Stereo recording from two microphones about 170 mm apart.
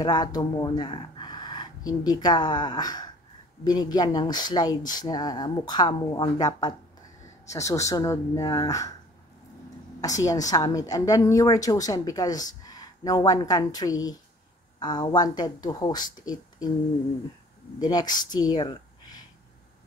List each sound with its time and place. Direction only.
0.0 s speech: 25° left (ahead or behind)
9.9 s a woman's voice: 20° left (ahead or behind)
17.7 s speech: 25° left (ahead or behind)